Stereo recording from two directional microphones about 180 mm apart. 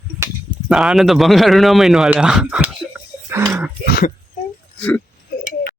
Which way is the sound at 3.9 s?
60° left (ahead or behind).